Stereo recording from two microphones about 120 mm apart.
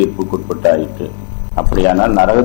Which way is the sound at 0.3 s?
20° left (ahead or behind).